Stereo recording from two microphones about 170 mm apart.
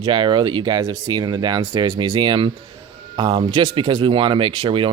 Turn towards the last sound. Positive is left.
turn(degrees=-30)  # may be behind; listen again after turning